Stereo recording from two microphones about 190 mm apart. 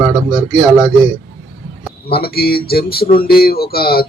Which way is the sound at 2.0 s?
55° left (ahead or behind).